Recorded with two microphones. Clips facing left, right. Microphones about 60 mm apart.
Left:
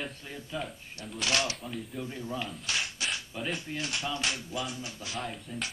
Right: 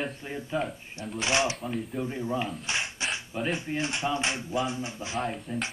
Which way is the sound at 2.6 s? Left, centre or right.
Right.